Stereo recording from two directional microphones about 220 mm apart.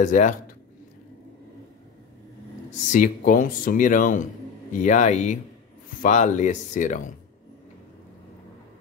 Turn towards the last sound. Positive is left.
turn(degrees=35)  # may be behind; listen again after turning